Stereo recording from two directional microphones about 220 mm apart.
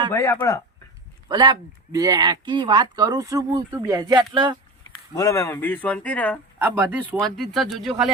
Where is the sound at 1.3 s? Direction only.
20° right (ahead or behind).